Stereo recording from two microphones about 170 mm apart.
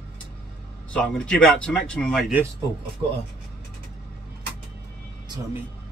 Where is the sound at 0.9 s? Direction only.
5° left (ahead or behind).